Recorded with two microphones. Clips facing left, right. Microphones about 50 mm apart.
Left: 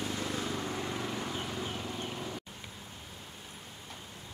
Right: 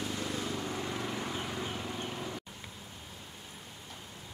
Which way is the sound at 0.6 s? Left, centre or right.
Centre.